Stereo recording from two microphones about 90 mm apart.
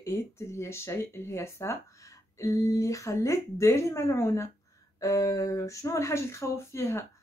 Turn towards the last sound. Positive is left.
turn(degrees=30)  # may be behind; listen again after turning